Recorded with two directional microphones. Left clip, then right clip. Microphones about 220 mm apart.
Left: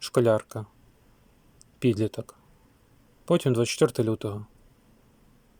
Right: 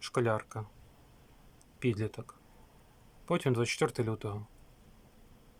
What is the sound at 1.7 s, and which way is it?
Speech, 15° left (ahead or behind).